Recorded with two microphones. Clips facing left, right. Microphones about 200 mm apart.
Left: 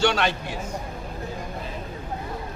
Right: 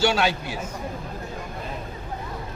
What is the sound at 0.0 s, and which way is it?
Speech, 5° right (ahead or behind).